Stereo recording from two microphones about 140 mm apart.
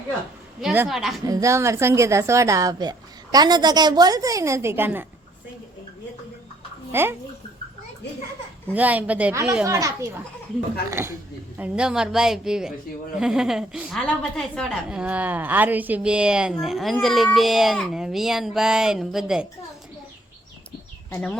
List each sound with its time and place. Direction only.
0.6 s speech: 10° right (ahead or behind)
0.9 s speech: centre (ahead or behind)
1.2 s a woman's voice: 25° right (ahead or behind)
6.9 s speech: 15° right (ahead or behind)
8.7 s speech: 10° right (ahead or behind)
9.3 s a woman's voice: 20° right (ahead or behind); by 14.0 s 5° right (ahead or behind)
14.2 s a woman's voice: 5° left (ahead or behind)
14.8 s speech: 10° right (ahead or behind)